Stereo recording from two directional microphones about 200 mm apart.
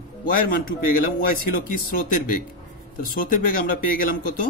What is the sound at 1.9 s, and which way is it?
Speech, 45° left (ahead or behind).